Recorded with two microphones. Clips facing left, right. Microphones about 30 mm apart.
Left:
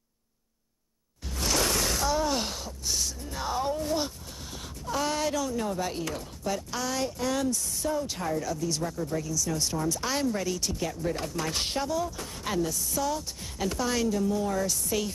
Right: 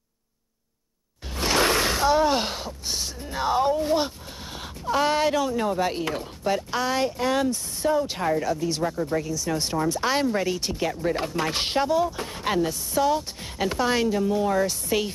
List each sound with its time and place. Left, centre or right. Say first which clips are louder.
1.3 s speech: right 6 dB; right